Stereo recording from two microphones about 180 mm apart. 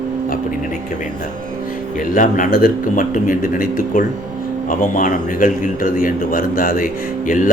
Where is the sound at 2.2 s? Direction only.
50° left (ahead or behind).